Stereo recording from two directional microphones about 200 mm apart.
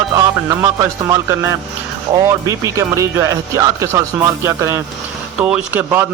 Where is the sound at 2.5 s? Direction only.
15° right (ahead or behind).